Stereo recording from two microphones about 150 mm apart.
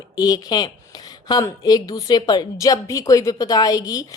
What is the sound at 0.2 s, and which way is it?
A woman's voice, 25° left (ahead or behind).